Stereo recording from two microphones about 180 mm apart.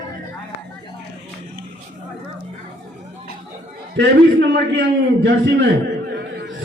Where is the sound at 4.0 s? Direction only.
70° right (ahead or behind).